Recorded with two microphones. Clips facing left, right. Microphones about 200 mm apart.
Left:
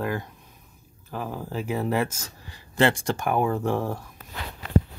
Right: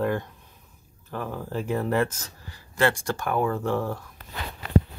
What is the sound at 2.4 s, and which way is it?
Speech, 20° left (ahead or behind).